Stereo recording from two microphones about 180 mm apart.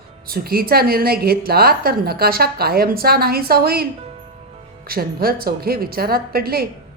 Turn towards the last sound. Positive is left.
turn(degrees=-55)  # may be behind; listen again after turning